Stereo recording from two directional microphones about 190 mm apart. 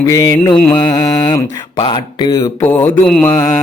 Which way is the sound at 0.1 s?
15° left (ahead or behind).